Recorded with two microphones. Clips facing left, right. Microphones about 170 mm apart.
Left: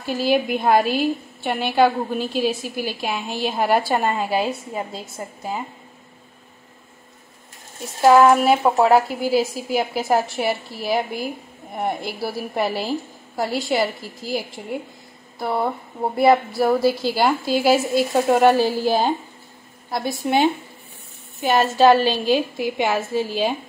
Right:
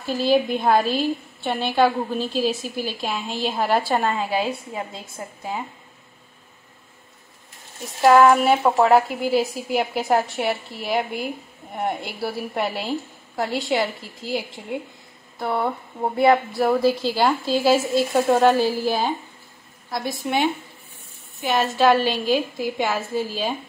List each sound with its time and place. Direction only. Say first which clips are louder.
0.2 s a woman's voice: even; 10° left (ahead or behind)
8.0 s a woman's voice: left 1 dB; 5° left (ahead or behind)
19.9 s a woman's voice: left 3 dB; 30° left (ahead or behind)
21.5 s a woman's voice: left 3 dB; 35° left (ahead or behind)